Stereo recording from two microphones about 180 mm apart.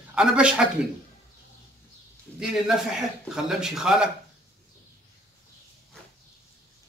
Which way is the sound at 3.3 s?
5° right (ahead or behind).